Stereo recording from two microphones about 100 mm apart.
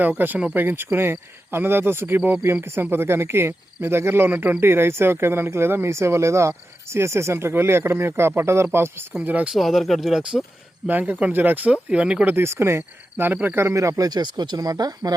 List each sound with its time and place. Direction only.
0.0 s speech: 20° right (ahead or behind)
9.6 s speech: centre (ahead or behind)
10.8 s speech: 15° right (ahead or behind); by 15.1 s 40° right (ahead or behind)